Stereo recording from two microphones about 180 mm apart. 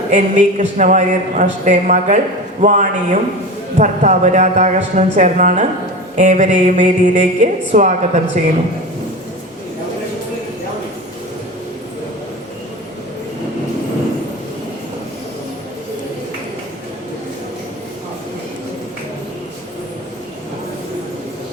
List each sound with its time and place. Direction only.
0.1 s a woman's voice: 45° right (ahead or behind)